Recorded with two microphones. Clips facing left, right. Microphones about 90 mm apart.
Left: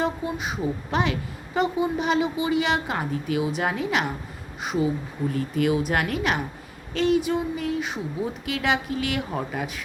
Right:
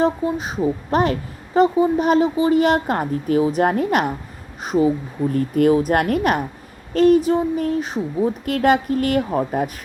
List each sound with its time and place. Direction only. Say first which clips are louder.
0.0 s a woman's voice: right 7 dB; 35° right (ahead or behind)
4.6 s a woman's voice: right 7 dB; 40° right (ahead or behind)